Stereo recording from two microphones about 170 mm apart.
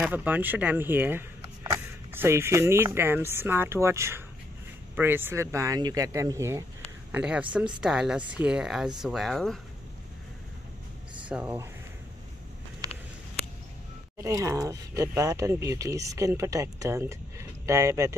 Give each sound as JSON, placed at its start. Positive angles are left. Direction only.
{"t": 0.0, "sound": "speech", "side_deg": -10}
{"t": 11.2, "sound": "speech", "side_deg": -10}
{"t": 14.1, "sound": "speech", "side_deg": -20}